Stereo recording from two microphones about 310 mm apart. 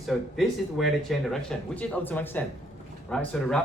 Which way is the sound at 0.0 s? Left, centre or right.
Centre.